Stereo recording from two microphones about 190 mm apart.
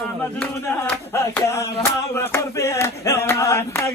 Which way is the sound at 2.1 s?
15° left (ahead or behind).